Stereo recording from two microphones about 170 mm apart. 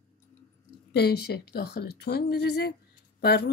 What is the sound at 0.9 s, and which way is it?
Speech, 70° left (ahead or behind).